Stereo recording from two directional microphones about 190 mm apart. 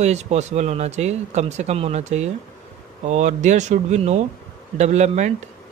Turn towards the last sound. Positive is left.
turn(degrees=-35)  # may be behind; listen again after turning